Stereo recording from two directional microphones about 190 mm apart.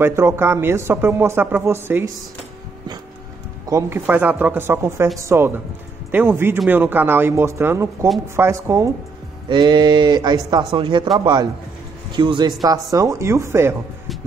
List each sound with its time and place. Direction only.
0.0 s speech: 15° right (ahead or behind)
3.7 s speech: 10° right (ahead or behind)